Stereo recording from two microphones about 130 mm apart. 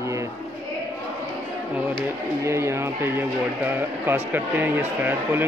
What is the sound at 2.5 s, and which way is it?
Speech, 20° right (ahead or behind).